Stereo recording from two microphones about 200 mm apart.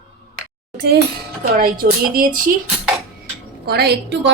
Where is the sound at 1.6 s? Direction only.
45° right (ahead or behind).